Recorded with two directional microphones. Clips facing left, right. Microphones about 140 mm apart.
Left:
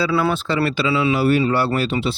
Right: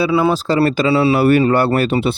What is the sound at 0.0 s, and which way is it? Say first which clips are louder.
Speech: right 4 dB; 20° right (ahead or behind).